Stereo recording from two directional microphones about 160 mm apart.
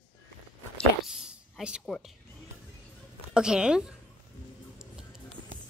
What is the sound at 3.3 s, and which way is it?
Speech, 5° right (ahead or behind).